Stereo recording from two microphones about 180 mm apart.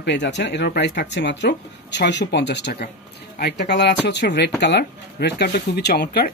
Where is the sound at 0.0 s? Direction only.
75° left (ahead or behind).